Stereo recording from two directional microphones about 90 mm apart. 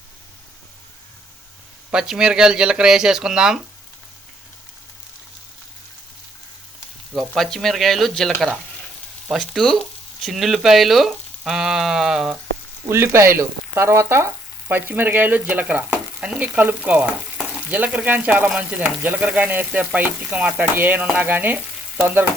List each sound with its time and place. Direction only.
1.9 s speech: 10° right (ahead or behind)
7.1 s speech: centre (ahead or behind)
9.3 s speech: centre (ahead or behind)
12.9 s frying: 30° right (ahead or behind)
17.7 s speech: 15° right (ahead or behind)